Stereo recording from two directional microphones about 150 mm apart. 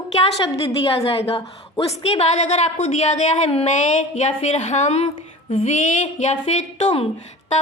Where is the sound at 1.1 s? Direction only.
40° left (ahead or behind).